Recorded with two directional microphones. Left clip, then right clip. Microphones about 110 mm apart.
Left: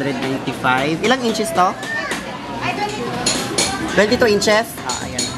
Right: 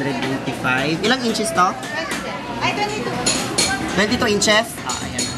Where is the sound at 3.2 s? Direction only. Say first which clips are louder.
Even; 15° left (ahead or behind).